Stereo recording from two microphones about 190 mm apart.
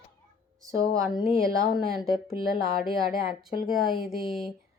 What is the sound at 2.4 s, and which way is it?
Speech, 50° right (ahead or behind).